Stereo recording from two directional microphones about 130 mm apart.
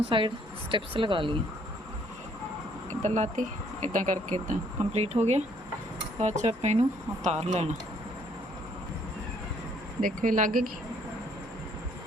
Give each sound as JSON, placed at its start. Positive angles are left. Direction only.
{"t": 0.0, "sound": "speech", "side_deg": -40}
{"t": 3.0, "sound": "speech", "side_deg": -70}
{"t": 10.0, "sound": "speech", "side_deg": -90}